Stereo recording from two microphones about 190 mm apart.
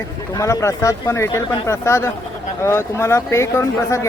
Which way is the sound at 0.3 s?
15° left (ahead or behind).